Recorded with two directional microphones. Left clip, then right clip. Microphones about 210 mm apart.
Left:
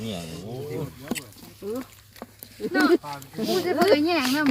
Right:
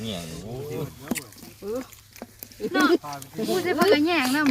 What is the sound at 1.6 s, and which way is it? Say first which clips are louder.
Speech: right 1 dB; 15° left (ahead or behind).